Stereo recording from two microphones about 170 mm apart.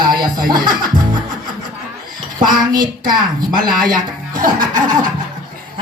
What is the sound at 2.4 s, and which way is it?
A woman's voice, 25° right (ahead or behind).